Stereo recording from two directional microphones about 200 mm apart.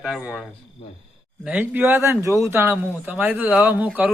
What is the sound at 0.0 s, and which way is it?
Speech, 5° right (ahead or behind).